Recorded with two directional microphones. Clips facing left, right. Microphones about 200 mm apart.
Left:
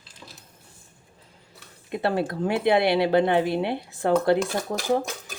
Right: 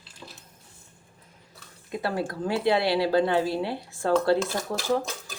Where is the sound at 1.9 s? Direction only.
25° left (ahead or behind).